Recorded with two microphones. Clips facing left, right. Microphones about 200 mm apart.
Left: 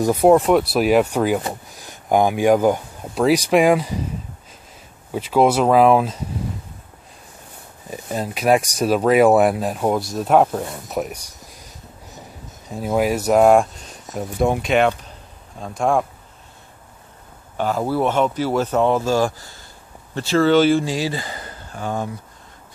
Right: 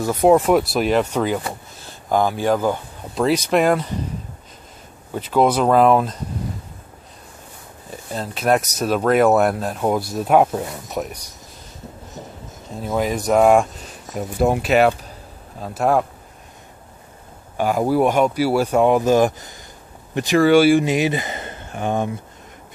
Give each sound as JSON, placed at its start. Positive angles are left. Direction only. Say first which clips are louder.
{"t": 0.0, "sound": "speech", "louder": "left 2 dB", "side_deg": 10}
{"t": 0.3, "sound": "speech", "louder": "right 1 dB", "side_deg": 0}
{"t": 5.1, "sound": "speech", "louder": "left 1 dB", "side_deg": 5}
{"t": 7.9, "sound": "speech", "louder": "left 3 dB", "side_deg": 10}
{"t": 12.7, "sound": "speech", "louder": "left 2 dB", "side_deg": 10}
{"t": 17.6, "sound": "speech", "louder": "right 3 dB", "side_deg": -10}